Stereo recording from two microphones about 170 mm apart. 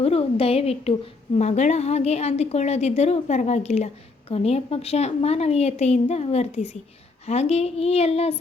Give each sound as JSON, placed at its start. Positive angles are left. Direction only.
{"t": 0.0, "sound": "a woman's voice", "side_deg": 35}